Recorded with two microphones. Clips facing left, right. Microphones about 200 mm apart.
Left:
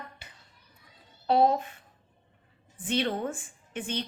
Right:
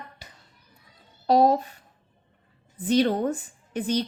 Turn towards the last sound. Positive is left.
turn(degrees=-40)  # may be behind; listen again after turning